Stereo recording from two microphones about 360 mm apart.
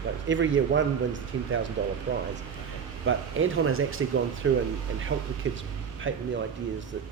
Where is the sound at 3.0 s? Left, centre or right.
Right.